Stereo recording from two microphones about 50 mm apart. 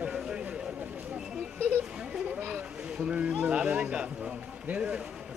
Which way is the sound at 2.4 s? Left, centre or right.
Right.